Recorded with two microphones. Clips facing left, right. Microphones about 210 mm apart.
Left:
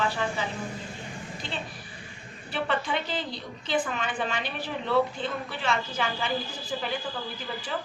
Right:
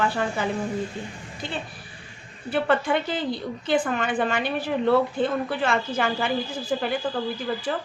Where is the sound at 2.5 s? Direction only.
55° right (ahead or behind).